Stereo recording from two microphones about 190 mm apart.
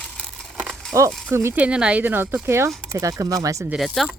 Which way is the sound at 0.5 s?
Centre (ahead or behind).